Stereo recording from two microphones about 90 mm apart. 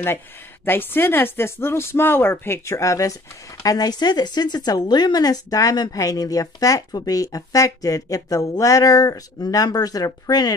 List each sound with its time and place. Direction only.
0.7 s speech: 25° left (ahead or behind); by 10.5 s 45° left (ahead or behind)